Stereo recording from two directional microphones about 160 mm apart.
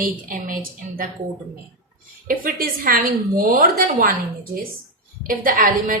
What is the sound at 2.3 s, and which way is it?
A woman's voice, 65° right (ahead or behind).